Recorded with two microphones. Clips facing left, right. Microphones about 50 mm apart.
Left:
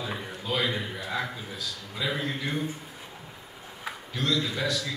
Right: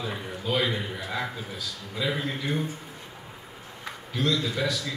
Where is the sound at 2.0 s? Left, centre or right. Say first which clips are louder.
Right 2 dB; centre.